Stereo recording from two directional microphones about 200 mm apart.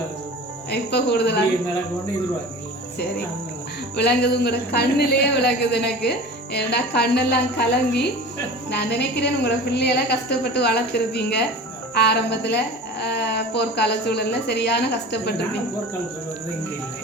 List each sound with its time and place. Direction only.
0.7 s a man's voice: 55° left (ahead or behind)
3.9 s a man's voice: 55° left (ahead or behind)